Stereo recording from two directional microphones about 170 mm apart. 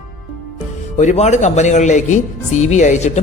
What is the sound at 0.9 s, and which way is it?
A woman's voice, 40° left (ahead or behind).